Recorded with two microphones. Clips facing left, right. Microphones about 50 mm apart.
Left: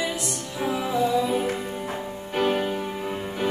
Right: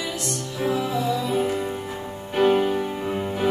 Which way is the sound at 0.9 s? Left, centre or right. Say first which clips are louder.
Left 1 dB; centre.